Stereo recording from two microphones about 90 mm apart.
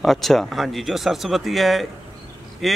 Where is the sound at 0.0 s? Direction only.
Centre (ahead or behind).